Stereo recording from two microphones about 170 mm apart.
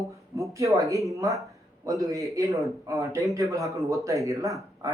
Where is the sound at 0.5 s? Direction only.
20° right (ahead or behind).